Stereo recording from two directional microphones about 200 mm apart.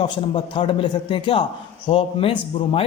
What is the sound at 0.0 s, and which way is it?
A man's voice, 25° left (ahead or behind).